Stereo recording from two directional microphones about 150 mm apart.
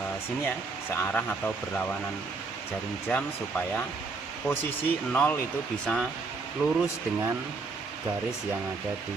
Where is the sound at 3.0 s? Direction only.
10° left (ahead or behind).